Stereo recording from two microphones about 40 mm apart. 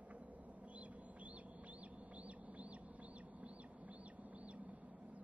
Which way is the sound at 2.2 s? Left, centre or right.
Right.